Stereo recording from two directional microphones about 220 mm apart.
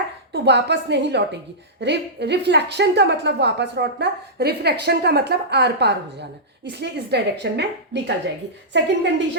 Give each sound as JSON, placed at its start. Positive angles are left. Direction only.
{"t": 0.3, "sound": "a woman's voice", "side_deg": -50}